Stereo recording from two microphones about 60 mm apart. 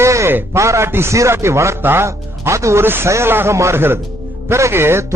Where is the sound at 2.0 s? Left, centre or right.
Right.